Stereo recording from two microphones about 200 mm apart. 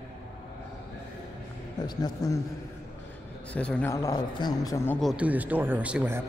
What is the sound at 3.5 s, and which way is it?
Speech, 5° left (ahead or behind).